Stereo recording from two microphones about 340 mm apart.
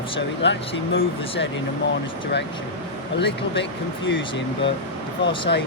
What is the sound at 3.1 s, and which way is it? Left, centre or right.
Speech, left.